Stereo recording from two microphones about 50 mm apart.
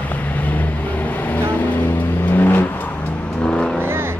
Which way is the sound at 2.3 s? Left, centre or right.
Left.